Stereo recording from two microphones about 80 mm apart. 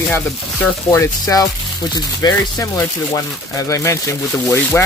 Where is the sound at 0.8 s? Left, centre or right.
Left.